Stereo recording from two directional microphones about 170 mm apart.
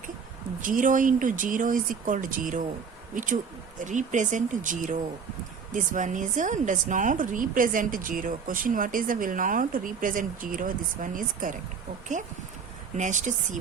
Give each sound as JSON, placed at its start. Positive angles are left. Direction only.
{"t": 0.6, "sound": "speech", "side_deg": -50}
{"t": 3.8, "sound": "speech", "side_deg": -45}
{"t": 13.0, "sound": "speech", "side_deg": -45}